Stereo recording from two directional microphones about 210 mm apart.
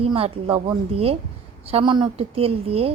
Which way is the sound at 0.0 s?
25° right (ahead or behind).